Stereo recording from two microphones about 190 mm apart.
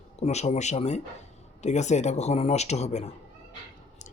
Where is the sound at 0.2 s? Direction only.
35° left (ahead or behind).